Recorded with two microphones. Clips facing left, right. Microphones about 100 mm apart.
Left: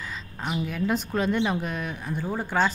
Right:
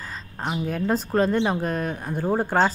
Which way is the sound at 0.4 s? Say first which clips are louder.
Right 2 dB; 35° right (ahead or behind).